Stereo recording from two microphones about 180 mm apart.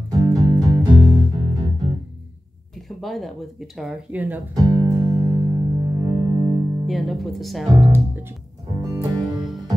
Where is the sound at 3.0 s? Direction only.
Centre (ahead or behind).